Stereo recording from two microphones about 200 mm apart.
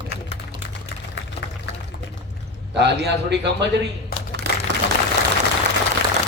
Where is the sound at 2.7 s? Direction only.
55° right (ahead or behind).